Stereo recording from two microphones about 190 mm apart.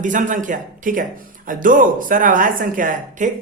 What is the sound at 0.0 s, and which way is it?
Speech, 40° right (ahead or behind).